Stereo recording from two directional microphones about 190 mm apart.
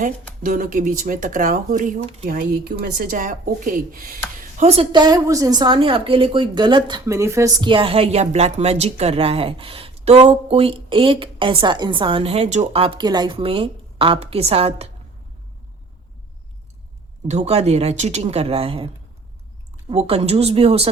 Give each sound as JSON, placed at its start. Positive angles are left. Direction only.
{"t": 0.0, "sound": "speech", "side_deg": -45}
{"t": 17.2, "sound": "speech", "side_deg": -35}
{"t": 19.9, "sound": "speech", "side_deg": -30}